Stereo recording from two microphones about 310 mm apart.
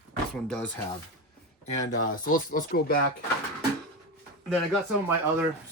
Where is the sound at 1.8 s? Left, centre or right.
Left.